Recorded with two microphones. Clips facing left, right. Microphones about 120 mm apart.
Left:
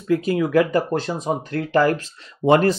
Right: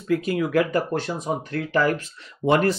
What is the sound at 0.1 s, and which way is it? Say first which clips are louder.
Speech: left 3 dB; 25° left (ahead or behind).